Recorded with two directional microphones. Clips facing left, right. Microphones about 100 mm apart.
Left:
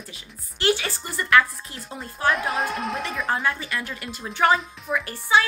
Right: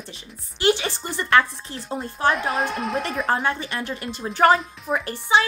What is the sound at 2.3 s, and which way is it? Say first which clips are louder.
A woman's voice: right 1 dB; centre (ahead or behind).